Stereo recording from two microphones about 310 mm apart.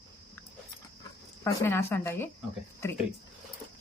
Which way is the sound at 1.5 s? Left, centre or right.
Centre.